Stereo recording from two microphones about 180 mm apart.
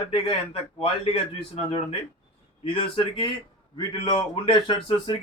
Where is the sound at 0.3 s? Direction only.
30° left (ahead or behind).